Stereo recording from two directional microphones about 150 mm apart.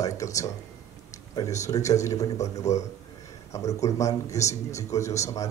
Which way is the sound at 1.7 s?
20° left (ahead or behind).